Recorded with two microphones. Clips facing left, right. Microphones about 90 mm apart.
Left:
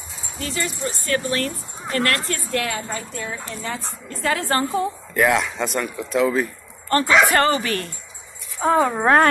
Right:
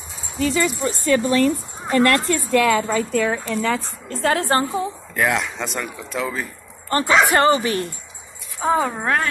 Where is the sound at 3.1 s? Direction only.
90° right.